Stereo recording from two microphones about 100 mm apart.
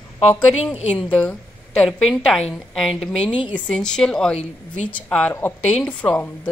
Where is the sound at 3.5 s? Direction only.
10° left (ahead or behind).